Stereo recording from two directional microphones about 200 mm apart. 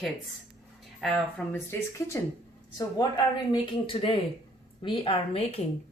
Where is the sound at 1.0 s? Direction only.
Centre (ahead or behind).